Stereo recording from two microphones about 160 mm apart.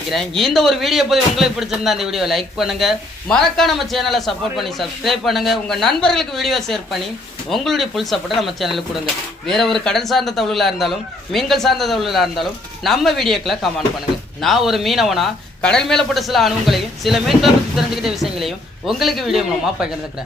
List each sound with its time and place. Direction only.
0.1 s speech: centre (ahead or behind)